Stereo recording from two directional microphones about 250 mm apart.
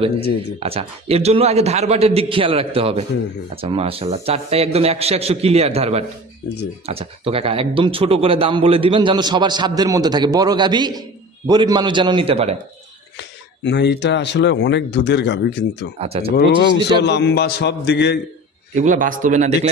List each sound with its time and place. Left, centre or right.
0.6 s a man's voice: right
13.7 s speech: left
16.0 s a man's voice: right
16.3 s speech: left
18.8 s a man's voice: right